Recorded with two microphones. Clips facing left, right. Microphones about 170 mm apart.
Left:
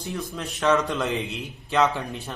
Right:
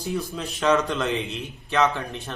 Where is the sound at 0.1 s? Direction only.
Centre (ahead or behind).